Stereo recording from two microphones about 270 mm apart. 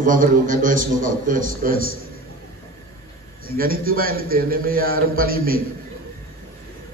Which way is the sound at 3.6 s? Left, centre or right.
Right.